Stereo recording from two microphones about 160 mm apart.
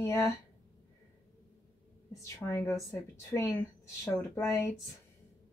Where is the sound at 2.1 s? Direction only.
20° left (ahead or behind).